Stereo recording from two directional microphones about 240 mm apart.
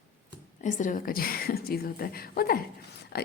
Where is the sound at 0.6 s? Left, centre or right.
Left.